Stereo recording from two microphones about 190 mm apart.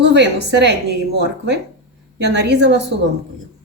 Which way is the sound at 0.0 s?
65° right (ahead or behind).